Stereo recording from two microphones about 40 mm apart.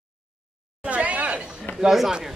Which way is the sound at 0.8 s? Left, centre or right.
Right.